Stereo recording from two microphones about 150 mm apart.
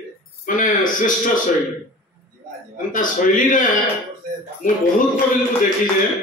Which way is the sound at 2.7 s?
60° left (ahead or behind).